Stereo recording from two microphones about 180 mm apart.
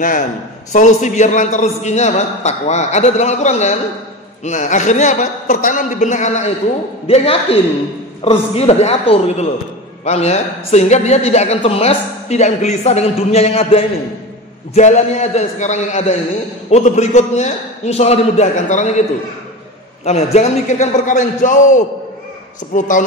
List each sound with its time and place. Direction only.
0.0 s a man's voice: 45° left (ahead or behind)
8.2 s a woman's voice: 35° left (ahead or behind)
20.1 s a woman's voice: 35° left (ahead or behind)